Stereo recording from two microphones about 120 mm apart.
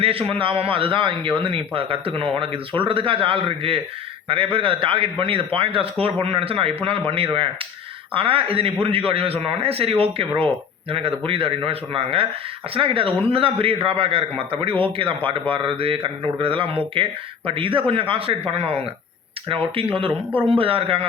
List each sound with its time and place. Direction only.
0.0 s a man's voice: 50° right (ahead or behind)
8.1 s a man's voice: 50° right (ahead or behind)